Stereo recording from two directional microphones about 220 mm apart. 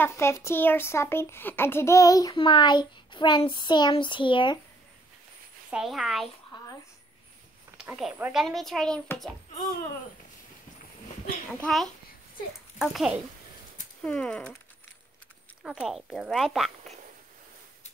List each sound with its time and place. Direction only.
0.0 s speech: 10° left (ahead or behind)
5.7 s speech: centre (ahead or behind)
6.5 s a sound: 20° left (ahead or behind)
7.7 s speech: 5° right (ahead or behind)
11.6 s speech: centre (ahead or behind)
15.6 s speech: 5° right (ahead or behind)